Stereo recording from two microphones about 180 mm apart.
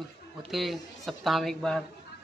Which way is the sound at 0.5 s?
Centre (ahead or behind).